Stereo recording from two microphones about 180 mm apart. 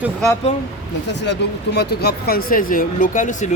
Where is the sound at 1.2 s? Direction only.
70° left (ahead or behind).